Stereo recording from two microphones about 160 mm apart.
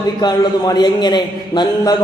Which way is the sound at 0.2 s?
25° left (ahead or behind).